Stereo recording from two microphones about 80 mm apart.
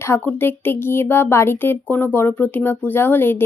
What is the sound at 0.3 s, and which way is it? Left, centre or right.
Speech, left.